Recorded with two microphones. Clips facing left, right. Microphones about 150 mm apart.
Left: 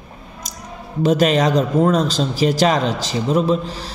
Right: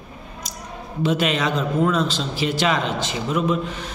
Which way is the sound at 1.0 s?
40° left (ahead or behind).